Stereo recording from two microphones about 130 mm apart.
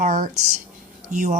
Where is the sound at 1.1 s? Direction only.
75° right (ahead or behind).